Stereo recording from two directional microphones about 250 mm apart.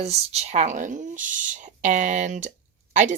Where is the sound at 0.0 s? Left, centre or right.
Right.